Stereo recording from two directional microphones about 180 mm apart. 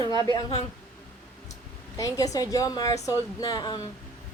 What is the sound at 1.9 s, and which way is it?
A woman's voice, 20° left (ahead or behind).